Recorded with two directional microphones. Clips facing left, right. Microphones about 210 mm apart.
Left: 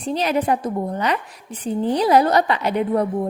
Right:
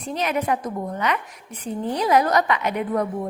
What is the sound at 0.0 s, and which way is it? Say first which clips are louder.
A woman's voice: left 4 dB; 30° left (ahead or behind).